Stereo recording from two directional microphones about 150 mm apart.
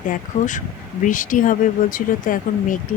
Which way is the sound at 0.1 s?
55° left (ahead or behind).